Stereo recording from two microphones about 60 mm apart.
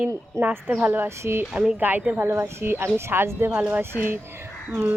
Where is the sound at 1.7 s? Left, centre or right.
Right.